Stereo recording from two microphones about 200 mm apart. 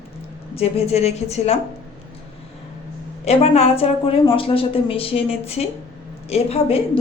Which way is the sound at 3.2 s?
30° left (ahead or behind).